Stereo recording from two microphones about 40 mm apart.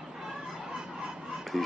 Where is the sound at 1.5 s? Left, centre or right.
Centre.